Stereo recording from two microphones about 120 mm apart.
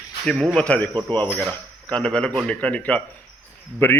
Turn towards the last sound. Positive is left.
turn(degrees=15)  # may be behind; listen again after turning